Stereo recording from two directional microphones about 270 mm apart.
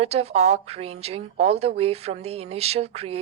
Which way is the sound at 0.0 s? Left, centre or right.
Right.